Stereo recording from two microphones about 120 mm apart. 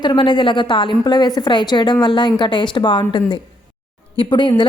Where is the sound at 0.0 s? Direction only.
40° left (ahead or behind).